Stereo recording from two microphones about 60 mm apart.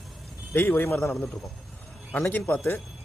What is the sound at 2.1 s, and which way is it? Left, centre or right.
Speech, left.